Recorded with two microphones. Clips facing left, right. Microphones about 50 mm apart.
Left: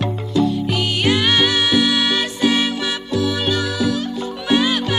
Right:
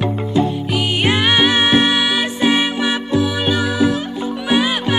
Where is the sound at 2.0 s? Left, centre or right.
Centre.